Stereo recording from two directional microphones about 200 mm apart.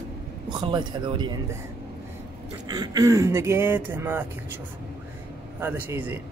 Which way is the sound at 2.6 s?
20° right (ahead or behind).